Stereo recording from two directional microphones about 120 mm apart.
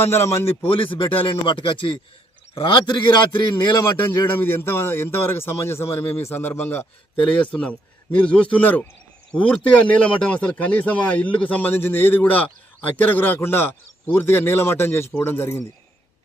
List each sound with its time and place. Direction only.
0.0 s a man's voice: 20° left (ahead or behind)
0.6 s a man's voice: 50° left (ahead or behind)
4.1 s a man's voice: 20° left (ahead or behind)